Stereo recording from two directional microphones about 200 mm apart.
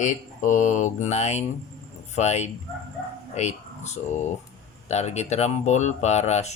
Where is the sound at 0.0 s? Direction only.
40° left (ahead or behind).